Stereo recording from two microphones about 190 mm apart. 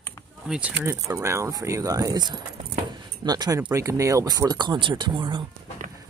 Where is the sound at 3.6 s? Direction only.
15° right (ahead or behind).